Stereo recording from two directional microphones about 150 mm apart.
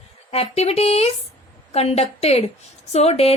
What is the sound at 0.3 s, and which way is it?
A woman's voice, 45° left (ahead or behind).